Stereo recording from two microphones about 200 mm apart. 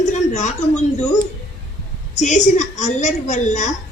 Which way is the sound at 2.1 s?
35° left (ahead or behind).